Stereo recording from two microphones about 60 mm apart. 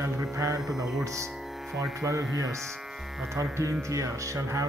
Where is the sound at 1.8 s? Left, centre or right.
Right.